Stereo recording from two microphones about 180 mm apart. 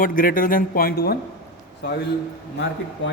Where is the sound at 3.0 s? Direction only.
90° left.